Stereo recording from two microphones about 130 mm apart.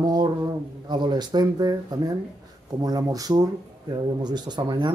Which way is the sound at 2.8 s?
30° right (ahead or behind).